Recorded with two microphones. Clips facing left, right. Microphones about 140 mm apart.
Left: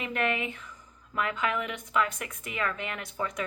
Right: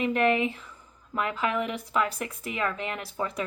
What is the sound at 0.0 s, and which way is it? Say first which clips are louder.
Speech: right 6 dB; 35° right (ahead or behind).